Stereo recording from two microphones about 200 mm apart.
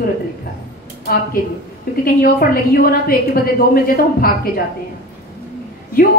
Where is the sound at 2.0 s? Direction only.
50° left (ahead or behind).